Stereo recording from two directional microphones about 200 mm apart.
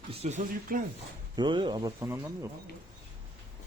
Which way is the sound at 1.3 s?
25° right (ahead or behind).